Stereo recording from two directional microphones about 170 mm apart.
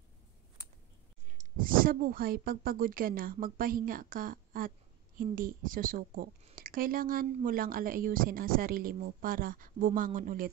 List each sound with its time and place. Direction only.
1.4 s a woman's voice: 55° right (ahead or behind)